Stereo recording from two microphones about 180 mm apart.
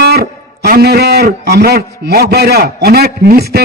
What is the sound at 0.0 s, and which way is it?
Speech, 60° right (ahead or behind).